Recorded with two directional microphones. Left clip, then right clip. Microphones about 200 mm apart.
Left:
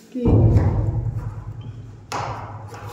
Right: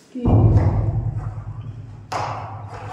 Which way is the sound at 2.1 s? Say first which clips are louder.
Right 2 dB; 45° left (ahead or behind).